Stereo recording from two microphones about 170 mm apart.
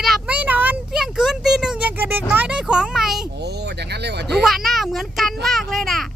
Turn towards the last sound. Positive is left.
turn(degrees=0)  # may be behind; listen again after turning